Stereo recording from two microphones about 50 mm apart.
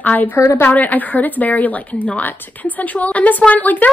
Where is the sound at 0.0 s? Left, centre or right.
Left.